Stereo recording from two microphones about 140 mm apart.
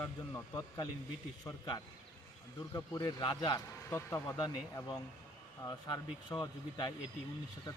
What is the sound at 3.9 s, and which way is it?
Speech, 20° left (ahead or behind).